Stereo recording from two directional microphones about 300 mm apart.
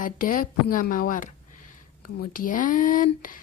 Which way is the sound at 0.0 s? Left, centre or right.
Left.